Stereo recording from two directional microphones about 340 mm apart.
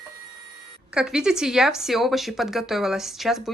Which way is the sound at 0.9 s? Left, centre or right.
Centre.